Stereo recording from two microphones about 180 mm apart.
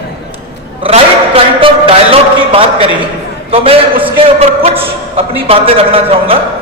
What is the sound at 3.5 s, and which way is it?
A man's voice, 30° right (ahead or behind).